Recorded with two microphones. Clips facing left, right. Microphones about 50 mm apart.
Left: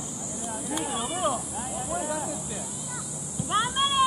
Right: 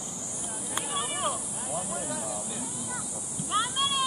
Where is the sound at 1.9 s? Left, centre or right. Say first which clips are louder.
Left 5 dB; centre.